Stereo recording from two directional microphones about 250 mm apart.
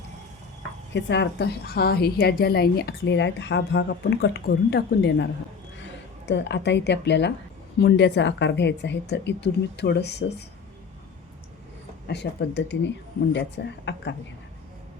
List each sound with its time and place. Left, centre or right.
0.9 s a woman's voice: left
12.0 s a woman's voice: left